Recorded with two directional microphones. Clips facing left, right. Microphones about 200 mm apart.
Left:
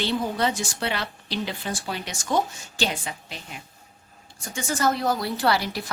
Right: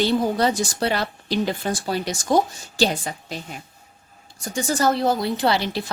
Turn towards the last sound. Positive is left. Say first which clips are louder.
# right 3 dB
turn(degrees=-25)  # may be behind; listen again after turning